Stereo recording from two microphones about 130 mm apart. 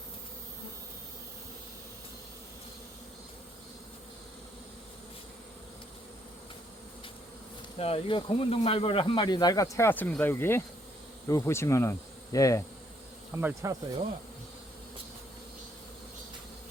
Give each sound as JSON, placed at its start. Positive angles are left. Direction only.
{"t": 7.8, "sound": "speech", "side_deg": 45}
{"t": 11.3, "sound": "insect", "side_deg": 20}
{"t": 13.3, "sound": "insect", "side_deg": -20}